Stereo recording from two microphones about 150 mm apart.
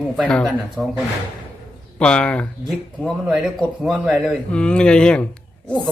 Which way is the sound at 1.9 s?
5° left (ahead or behind).